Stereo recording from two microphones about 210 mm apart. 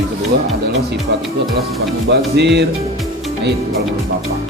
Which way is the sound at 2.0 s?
55° right (ahead or behind).